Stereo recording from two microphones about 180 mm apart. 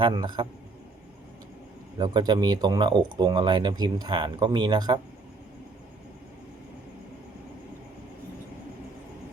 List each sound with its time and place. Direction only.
0.0 s speech: 25° right (ahead or behind)
2.0 s speech: 25° right (ahead or behind)